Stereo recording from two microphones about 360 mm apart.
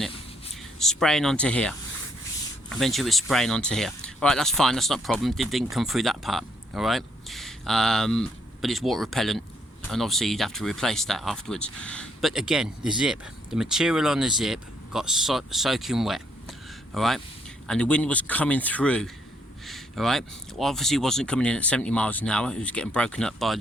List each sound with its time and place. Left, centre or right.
0.5 s speech: centre